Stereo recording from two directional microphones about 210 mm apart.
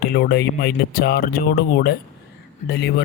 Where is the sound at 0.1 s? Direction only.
50° left (ahead or behind).